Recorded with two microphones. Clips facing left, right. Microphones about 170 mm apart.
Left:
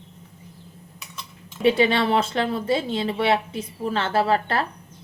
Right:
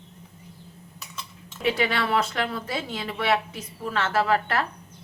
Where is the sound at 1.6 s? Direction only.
25° left (ahead or behind).